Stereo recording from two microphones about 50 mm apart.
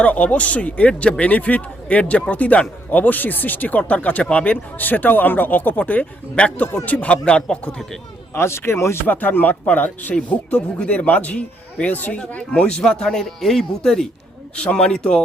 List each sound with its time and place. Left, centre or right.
0.0 s speech: left
4.8 s speech: left
6.4 s speech: centre
8.3 s speech: left
9.0 s speech: left
10.2 s speech: left
12.5 s speech: left
14.5 s speech: left